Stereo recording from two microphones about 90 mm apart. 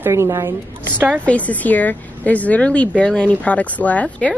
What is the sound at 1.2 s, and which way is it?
Speech, 15° left (ahead or behind).